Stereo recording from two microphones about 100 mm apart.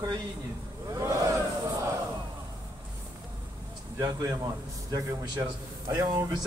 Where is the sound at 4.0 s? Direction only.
35° right (ahead or behind).